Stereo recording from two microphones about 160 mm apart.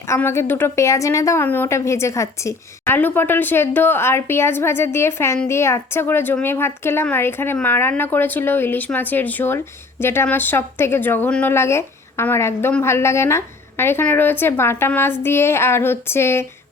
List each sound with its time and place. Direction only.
0.1 s a woman's voice: 15° left (ahead or behind)